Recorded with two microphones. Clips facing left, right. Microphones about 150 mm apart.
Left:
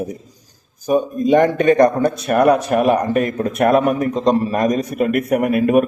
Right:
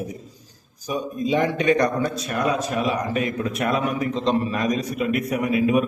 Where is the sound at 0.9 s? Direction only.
50° left (ahead or behind).